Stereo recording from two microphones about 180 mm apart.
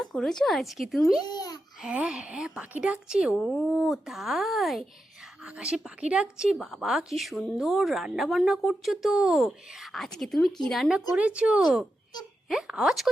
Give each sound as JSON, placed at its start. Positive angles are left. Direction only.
{"t": 0.0, "sound": "a woman's voice", "side_deg": 0}
{"t": 1.2, "sound": "a child's voice", "side_deg": 20}
{"t": 1.8, "sound": "a woman's voice", "side_deg": -5}